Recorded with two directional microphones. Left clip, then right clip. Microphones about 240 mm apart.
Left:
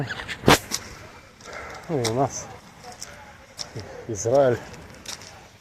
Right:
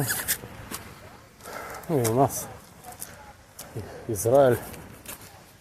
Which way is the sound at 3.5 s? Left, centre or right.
Centre.